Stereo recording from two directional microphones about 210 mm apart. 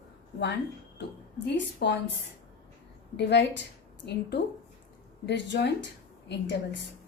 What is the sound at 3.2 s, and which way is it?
A woman's voice, 55° left (ahead or behind).